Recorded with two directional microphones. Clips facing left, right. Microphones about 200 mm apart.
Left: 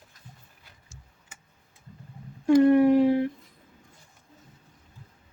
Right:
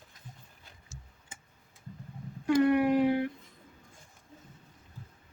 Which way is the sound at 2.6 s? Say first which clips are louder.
Left 5 dB; 30° left (ahead or behind).